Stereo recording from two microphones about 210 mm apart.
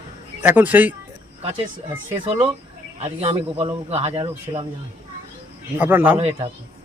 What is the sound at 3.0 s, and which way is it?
Speech, 25° right (ahead or behind).